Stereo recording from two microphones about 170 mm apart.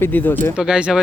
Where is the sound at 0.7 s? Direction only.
5° right (ahead or behind).